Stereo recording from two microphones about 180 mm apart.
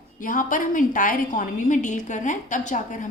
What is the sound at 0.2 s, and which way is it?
A woman's voice, 50° left (ahead or behind).